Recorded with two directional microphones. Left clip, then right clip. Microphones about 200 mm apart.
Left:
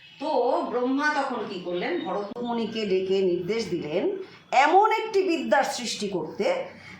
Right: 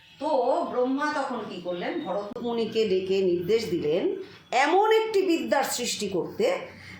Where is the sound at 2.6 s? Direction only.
Centre (ahead or behind).